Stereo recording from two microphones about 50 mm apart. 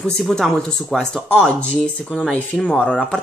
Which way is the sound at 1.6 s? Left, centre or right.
Left.